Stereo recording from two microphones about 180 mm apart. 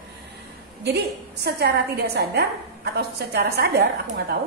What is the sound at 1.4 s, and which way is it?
A woman's voice, 65° right (ahead or behind).